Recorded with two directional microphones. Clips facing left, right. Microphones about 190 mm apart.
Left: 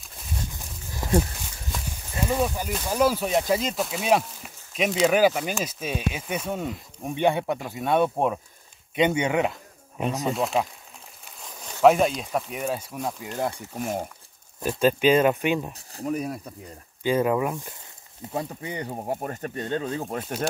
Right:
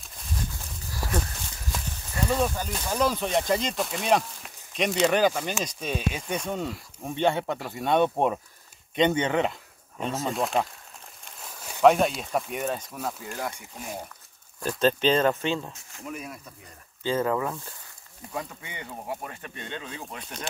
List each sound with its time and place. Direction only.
0.9 s a sound: 20° left (ahead or behind)
2.1 s speech: 15° left (ahead or behind)
7.7 s speech: 5° left (ahead or behind)
13.3 s speech: 25° left (ahead or behind)
14.8 s speech: 10° left (ahead or behind)
15.7 s speech: 35° left (ahead or behind)
17.0 s speech: 15° left (ahead or behind)
18.3 s speech: 35° left (ahead or behind)